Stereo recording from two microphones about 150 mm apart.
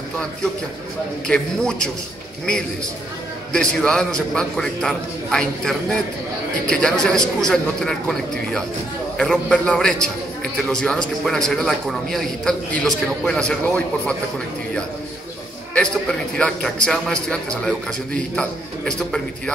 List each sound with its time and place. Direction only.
1.2 s a man's voice: 5° left (ahead or behind)
3.5 s a man's voice: 5° left (ahead or behind)
15.7 s a man's voice: 5° left (ahead or behind)